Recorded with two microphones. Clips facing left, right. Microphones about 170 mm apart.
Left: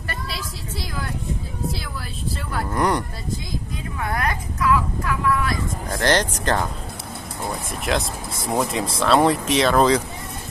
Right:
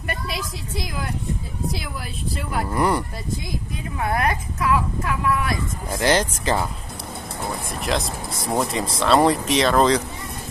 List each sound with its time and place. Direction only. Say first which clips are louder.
2.7 s speech: even; 5° right (ahead or behind)
4.0 s speech: right 3 dB; 25° right (ahead or behind)
5.9 s speech: right 1 dB; 5° right (ahead or behind)
7.8 s speech: left 1 dB; centre (ahead or behind)